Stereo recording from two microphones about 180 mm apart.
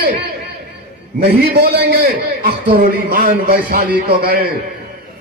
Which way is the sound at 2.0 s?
60° right (ahead or behind).